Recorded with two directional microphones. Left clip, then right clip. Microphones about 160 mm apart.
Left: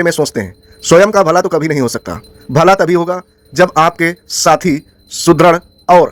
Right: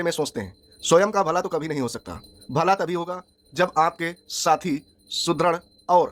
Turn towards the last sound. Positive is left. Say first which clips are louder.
# left 11 dB
turn(degrees=35)  # may be behind; listen again after turning